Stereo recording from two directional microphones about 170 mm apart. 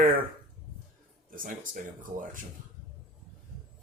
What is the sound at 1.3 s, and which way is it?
Speech, 55° right (ahead or behind).